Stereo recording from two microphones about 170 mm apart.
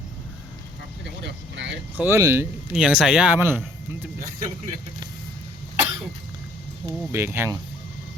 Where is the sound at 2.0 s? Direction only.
15° right (ahead or behind).